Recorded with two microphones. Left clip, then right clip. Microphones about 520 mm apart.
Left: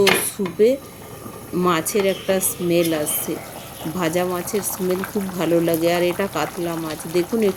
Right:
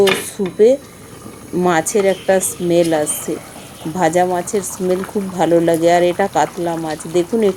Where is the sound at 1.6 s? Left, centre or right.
Left.